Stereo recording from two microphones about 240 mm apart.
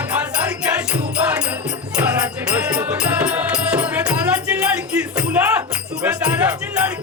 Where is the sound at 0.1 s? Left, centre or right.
Centre.